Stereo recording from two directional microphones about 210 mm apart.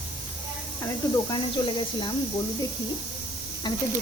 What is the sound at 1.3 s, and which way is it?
Speech, 25° left (ahead or behind).